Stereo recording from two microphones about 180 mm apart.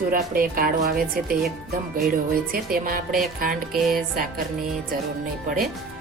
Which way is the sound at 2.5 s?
55° right (ahead or behind).